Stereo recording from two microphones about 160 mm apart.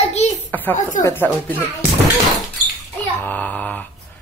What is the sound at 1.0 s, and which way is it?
Speech, 10° left (ahead or behind).